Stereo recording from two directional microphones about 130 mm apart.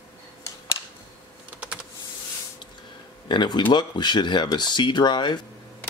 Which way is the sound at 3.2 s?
35° left (ahead or behind).